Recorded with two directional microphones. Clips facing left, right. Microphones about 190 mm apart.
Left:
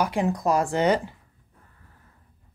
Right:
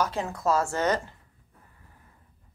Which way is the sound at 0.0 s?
15° left (ahead or behind).